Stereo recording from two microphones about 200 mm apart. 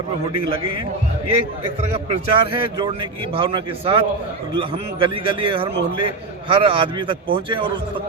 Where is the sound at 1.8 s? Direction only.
30° right (ahead or behind).